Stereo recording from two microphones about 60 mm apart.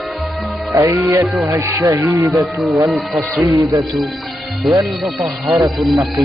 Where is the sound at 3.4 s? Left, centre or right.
Right.